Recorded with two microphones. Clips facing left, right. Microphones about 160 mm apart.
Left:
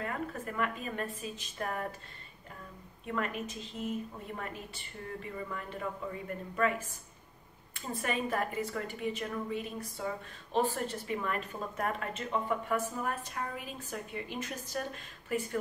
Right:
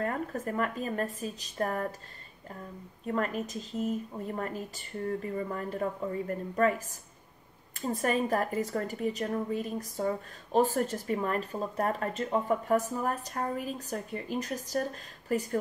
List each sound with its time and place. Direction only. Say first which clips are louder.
0.0 s a woman's voice: right 5 dB; 40° right (ahead or behind)
3.1 s a woman's voice: right 4 dB; 40° right (ahead or behind)
7.8 s a woman's voice: right 6 dB; 40° right (ahead or behind)